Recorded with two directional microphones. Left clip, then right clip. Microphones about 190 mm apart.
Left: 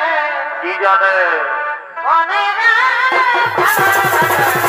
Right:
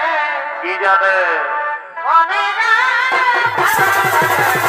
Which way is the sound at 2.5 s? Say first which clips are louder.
Left 1 dB; 70° right (ahead or behind).